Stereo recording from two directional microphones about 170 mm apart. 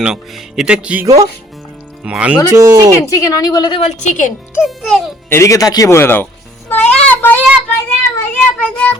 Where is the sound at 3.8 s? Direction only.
45° left (ahead or behind).